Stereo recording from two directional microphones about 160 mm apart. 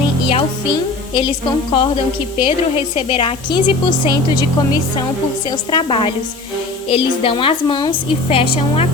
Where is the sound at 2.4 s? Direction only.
35° left (ahead or behind).